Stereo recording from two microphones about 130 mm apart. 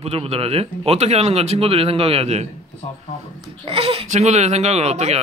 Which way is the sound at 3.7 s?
45° right (ahead or behind).